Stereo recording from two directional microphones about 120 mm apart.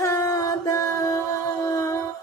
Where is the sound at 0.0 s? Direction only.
25° left (ahead or behind).